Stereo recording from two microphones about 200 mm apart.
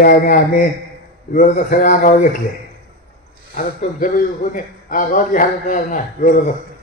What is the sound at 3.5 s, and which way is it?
A man's voice, 40° left (ahead or behind).